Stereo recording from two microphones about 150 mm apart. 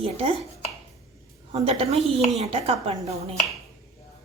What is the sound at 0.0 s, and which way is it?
Speech, 40° right (ahead or behind).